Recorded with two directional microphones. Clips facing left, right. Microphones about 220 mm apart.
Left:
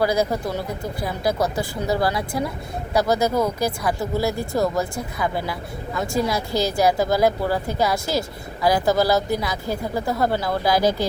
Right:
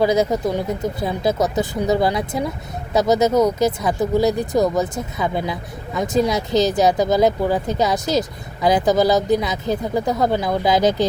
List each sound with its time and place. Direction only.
0.0 s speech: 20° right (ahead or behind)